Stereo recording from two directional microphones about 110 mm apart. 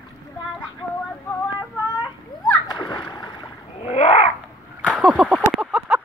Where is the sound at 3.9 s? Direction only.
80° left.